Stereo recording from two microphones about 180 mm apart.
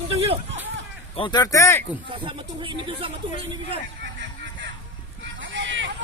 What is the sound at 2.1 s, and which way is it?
Speech, 30° right (ahead or behind).